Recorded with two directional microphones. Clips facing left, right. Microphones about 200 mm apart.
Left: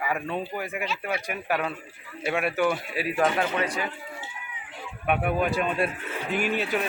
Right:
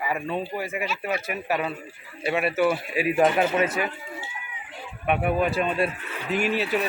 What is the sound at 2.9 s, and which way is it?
Speech, 15° right (ahead or behind).